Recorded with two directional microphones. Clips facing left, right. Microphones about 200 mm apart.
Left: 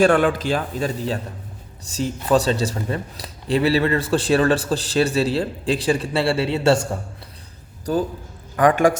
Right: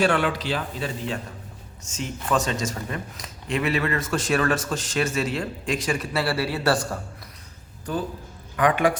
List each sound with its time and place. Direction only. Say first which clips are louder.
0.0 s speech: left 6 dB; 50° left (ahead or behind); by 7.0 s 25° left (ahead or behind)
7.9 s speech: left 6 dB; 40° left (ahead or behind)